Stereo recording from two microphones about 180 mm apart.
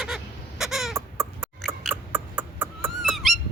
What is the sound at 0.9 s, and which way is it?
Chicken, 15° right (ahead or behind).